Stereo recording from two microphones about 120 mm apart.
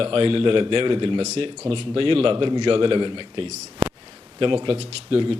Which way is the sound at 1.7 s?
50° right (ahead or behind).